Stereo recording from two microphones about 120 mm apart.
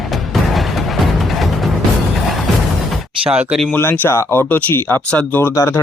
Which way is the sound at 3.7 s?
15° left (ahead or behind).